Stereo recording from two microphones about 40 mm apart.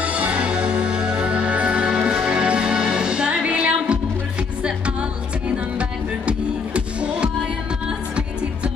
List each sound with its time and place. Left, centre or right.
0.0 s music: right
5.8 s music: right